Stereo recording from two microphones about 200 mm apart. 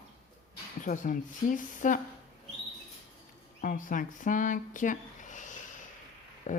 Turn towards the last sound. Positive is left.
turn(degrees=40)  # may be behind; listen again after turning